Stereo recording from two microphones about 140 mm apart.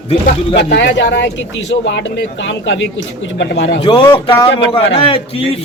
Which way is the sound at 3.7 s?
35° left (ahead or behind).